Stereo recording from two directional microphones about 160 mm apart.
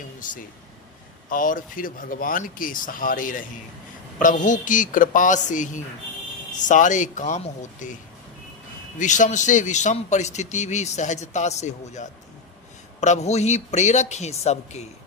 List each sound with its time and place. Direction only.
0.2 s a man's voice: 55° left (ahead or behind)
9.0 s a man's voice: 50° left (ahead or behind)